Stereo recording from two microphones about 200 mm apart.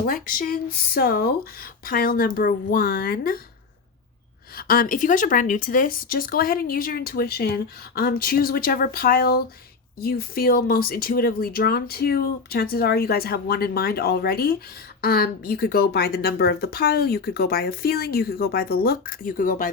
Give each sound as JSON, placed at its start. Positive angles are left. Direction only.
{"t": 0.0, "sound": "speech", "side_deg": 45}
{"t": 4.5, "sound": "speech", "side_deg": 45}